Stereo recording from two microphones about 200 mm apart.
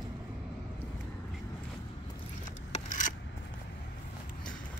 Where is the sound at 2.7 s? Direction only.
40° left (ahead or behind).